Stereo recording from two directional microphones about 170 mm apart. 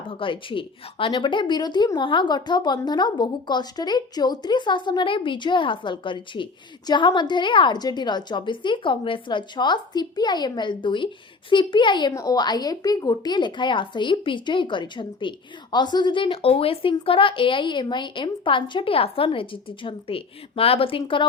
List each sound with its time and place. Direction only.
0.1 s a woman's voice: 30° left (ahead or behind)